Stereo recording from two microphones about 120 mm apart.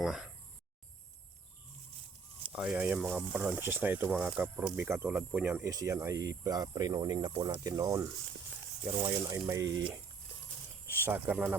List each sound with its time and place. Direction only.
0.0 s speech: 5° right (ahead or behind)
2.5 s speech: 5° right (ahead or behind)
5.6 s speech: 25° right (ahead or behind)
8.8 s speech: 40° right (ahead or behind)
10.9 s speech: 20° right (ahead or behind)